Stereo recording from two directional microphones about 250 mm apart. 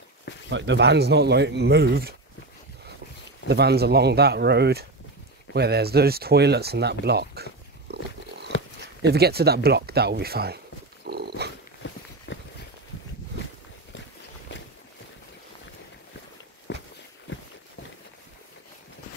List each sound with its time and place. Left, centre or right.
0.5 s speech: right
3.4 s speech: right
8.5 s purr: left
9.0 s speech: right
11.1 s dog: right
11.8 s walk: left
12.3 s a sound: left
16.7 s walk: left